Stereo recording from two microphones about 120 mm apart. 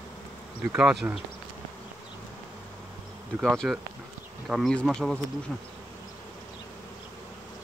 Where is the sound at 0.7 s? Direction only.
5° right (ahead or behind).